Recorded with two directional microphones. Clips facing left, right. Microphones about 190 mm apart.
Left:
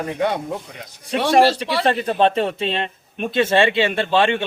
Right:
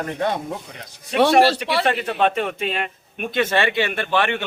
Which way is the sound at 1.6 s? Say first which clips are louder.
Left 1 dB; 35° left (ahead or behind).